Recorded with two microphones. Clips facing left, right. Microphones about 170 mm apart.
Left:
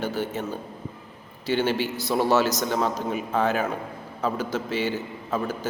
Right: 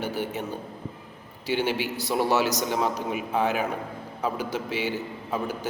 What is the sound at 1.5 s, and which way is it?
A man's voice, 15° right (ahead or behind).